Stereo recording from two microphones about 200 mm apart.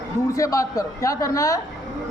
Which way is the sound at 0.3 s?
15° left (ahead or behind).